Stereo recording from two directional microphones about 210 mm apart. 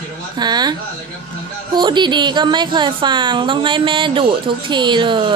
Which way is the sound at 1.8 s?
20° right (ahead or behind).